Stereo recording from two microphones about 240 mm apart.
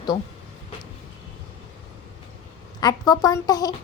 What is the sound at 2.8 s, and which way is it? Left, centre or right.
Speech, centre.